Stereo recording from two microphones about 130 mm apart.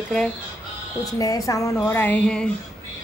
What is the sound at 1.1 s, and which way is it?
Speech, 25° left (ahead or behind).